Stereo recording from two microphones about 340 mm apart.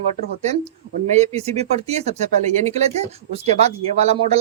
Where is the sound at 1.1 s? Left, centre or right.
Centre.